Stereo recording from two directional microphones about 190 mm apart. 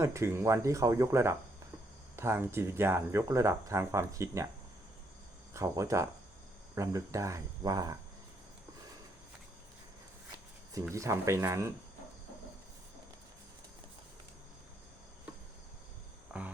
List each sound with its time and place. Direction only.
0.0 s speech: 15° right (ahead or behind)
5.5 s speech: 15° right (ahead or behind)
10.8 s speech: 15° right (ahead or behind)
16.3 s cricket: 5° right (ahead or behind)